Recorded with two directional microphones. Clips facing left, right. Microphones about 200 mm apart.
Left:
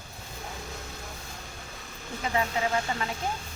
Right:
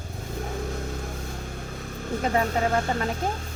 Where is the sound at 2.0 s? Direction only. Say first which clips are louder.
Right 5 dB; 45° right (ahead or behind).